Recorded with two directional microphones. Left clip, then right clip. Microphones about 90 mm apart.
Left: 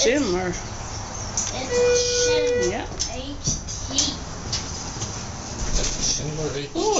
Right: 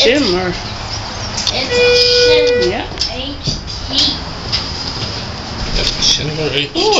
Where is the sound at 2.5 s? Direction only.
15° left (ahead or behind).